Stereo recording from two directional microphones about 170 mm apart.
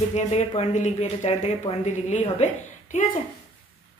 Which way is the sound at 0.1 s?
40° left (ahead or behind).